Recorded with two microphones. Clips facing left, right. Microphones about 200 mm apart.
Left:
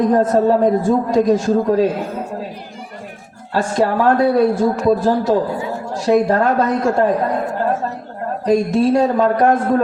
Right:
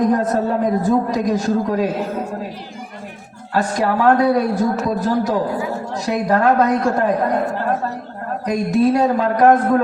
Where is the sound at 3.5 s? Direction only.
30° left (ahead or behind).